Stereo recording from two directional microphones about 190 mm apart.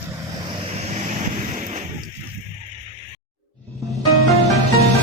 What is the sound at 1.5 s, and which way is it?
Artillery fire, 40° right (ahead or behind).